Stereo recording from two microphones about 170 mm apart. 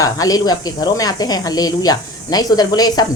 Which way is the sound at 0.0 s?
20° left (ahead or behind).